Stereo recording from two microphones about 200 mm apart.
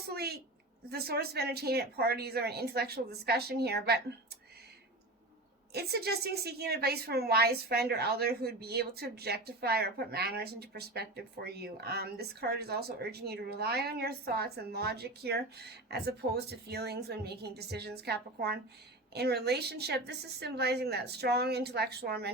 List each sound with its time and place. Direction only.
0.1 s a sound: 50° right (ahead or behind)
0.9 s a woman's voice: 50° right (ahead or behind)
5.7 s a woman's voice: 55° right (ahead or behind)